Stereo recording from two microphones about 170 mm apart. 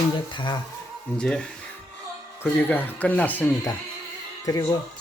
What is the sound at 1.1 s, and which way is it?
Speech, 5° left (ahead or behind).